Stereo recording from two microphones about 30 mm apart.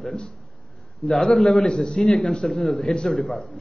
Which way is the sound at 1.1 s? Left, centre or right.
Centre.